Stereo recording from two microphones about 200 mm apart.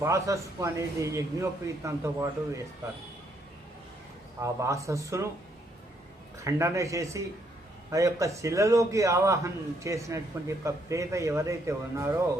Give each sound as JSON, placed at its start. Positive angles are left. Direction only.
{"t": 0.0, "sound": "a man's voice", "side_deg": -15}
{"t": 4.4, "sound": "a man's voice", "side_deg": -15}
{"t": 6.4, "sound": "a man's voice", "side_deg": -15}